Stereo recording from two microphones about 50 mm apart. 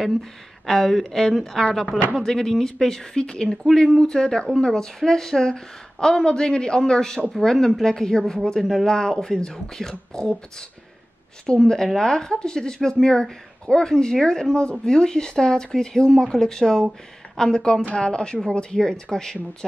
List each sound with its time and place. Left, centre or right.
0.0 s a woman's voice: centre
11.4 s a woman's voice: centre